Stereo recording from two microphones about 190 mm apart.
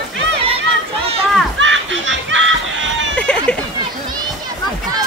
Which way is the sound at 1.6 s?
80° right.